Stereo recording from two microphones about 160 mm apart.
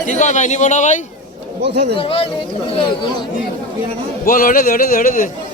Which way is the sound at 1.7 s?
90° right.